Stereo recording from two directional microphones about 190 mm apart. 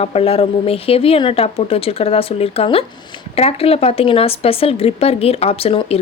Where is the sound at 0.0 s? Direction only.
30° left (ahead or behind).